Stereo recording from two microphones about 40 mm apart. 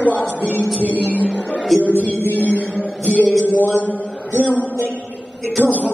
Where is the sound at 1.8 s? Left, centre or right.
Left.